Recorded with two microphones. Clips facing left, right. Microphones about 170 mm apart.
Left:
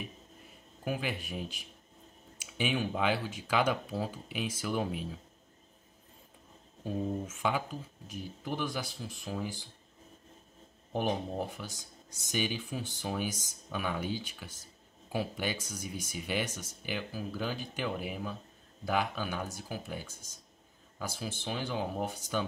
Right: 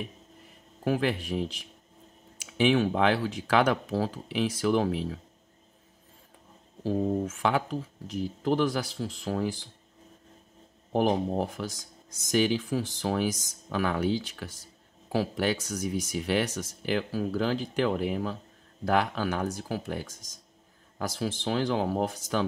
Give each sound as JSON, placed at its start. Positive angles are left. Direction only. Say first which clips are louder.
{"t": 0.8, "sound": "speech", "louder": "right 8 dB", "side_deg": -85}
{"t": 6.8, "sound": "speech", "louder": "right 7 dB", "side_deg": -90}
{"t": 10.9, "sound": "speech", "louder": "right 7 dB", "side_deg": -90}